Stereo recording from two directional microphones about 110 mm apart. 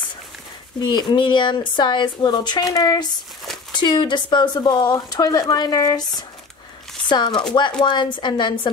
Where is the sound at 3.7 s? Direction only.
45° left (ahead or behind).